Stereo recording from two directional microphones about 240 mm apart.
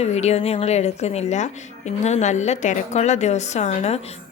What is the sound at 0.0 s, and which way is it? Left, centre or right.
A woman's voice, left.